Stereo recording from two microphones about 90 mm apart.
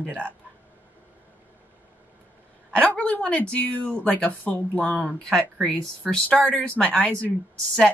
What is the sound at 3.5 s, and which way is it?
Speech, 15° left (ahead or behind).